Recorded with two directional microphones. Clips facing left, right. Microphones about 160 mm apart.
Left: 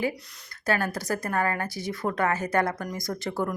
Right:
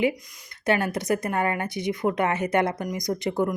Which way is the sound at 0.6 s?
20° right (ahead or behind).